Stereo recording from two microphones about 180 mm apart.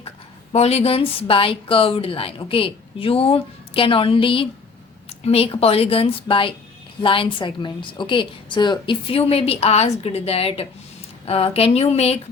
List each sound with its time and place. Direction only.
0.5 s a woman's voice: 35° left (ahead or behind)